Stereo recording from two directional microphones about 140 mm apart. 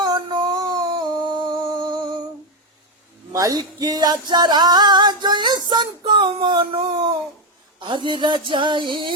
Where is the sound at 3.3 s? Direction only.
25° right (ahead or behind).